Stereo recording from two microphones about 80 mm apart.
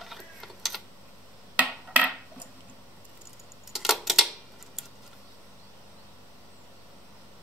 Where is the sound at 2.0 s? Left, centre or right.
Centre.